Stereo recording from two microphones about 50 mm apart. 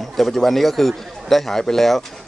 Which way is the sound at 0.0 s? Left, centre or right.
Centre.